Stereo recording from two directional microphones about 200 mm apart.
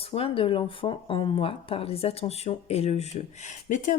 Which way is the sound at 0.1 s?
30° left (ahead or behind).